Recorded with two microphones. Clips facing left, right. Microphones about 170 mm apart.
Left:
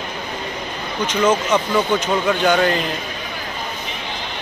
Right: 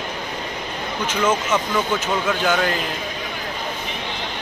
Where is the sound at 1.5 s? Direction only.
5° right (ahead or behind).